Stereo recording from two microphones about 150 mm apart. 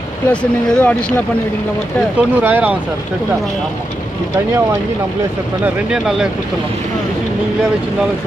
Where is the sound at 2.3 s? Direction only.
10° right (ahead or behind).